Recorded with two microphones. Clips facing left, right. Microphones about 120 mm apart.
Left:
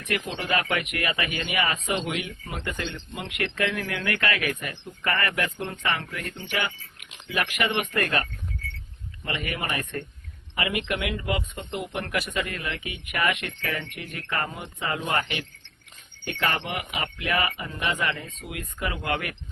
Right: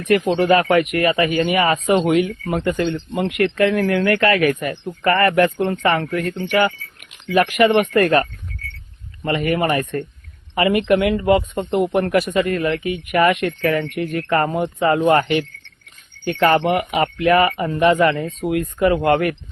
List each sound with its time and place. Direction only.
0.1 s speech: 45° right (ahead or behind)